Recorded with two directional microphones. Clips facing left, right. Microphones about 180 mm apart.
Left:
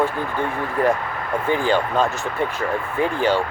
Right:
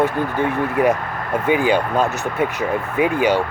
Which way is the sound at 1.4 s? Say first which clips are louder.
Right 3 dB; 10° right (ahead or behind).